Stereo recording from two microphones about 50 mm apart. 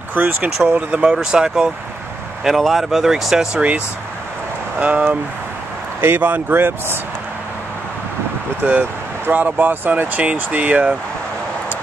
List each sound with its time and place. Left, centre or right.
0.1 s speech: right
1.1 s speech: centre
2.4 s speech: centre
4.7 s speech: right
5.9 s speech: right
9.3 s speech: right